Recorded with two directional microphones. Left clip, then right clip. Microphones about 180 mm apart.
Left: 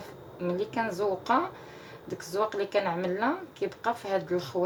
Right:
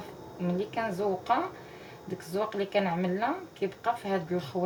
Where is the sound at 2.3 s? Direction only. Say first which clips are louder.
Left 1 dB; 45° left (ahead or behind).